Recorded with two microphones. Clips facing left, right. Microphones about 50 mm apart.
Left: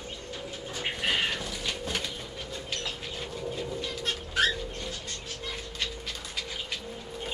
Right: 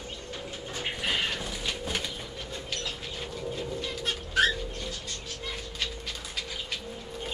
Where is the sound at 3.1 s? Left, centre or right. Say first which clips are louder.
Even; centre.